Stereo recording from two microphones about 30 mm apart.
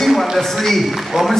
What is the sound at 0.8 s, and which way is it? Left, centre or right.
Speech, centre.